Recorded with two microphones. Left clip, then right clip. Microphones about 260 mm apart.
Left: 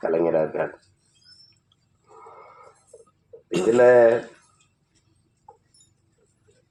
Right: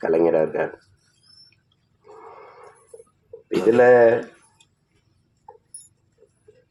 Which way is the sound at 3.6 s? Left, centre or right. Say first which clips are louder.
Right 1 dB; right.